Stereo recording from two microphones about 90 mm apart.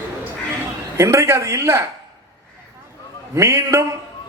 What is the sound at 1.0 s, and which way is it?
Speech, 30° right (ahead or behind).